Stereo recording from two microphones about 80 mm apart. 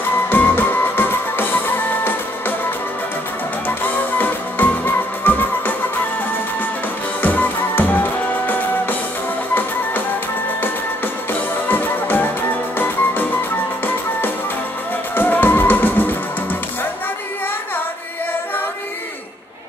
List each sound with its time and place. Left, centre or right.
0.3 s music: left
3.6 s music: left
7.2 s music: left
11.6 s music: left
15.1 s music: left